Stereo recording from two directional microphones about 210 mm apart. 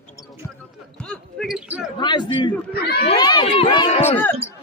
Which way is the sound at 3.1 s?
20° left (ahead or behind).